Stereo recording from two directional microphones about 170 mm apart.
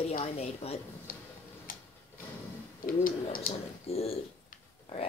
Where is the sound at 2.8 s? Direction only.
55° left (ahead or behind).